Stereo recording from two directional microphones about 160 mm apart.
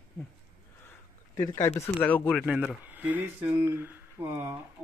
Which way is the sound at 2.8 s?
10° right (ahead or behind).